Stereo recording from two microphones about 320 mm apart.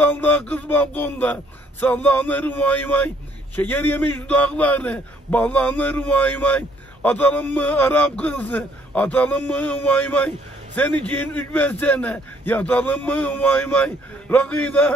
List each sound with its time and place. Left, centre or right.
0.0 s a man's voice: centre